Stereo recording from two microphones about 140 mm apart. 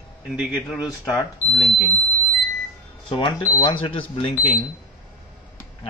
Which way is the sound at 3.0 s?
35° left (ahead or behind).